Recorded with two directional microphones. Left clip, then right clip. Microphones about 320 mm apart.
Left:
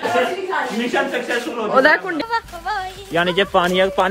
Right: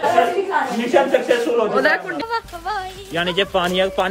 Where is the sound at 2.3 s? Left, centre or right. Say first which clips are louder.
Left 1 dB; centre.